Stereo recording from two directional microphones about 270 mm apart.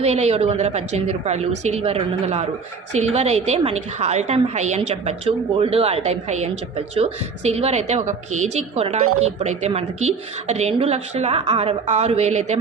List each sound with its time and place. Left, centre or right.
0.0 s a woman's voice: right